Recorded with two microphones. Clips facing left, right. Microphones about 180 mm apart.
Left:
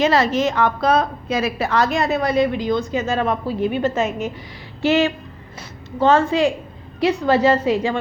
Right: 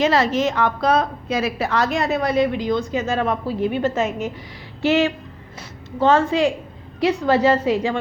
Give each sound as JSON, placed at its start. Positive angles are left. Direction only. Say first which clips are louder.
{"t": 0.0, "sound": "a woman's voice", "louder": "left 1 dB", "side_deg": 40}
{"t": 4.8, "sound": "a woman's voice", "louder": "left 1 dB", "side_deg": 35}
{"t": 7.0, "sound": "a woman's voice", "louder": "left 1 dB", "side_deg": 25}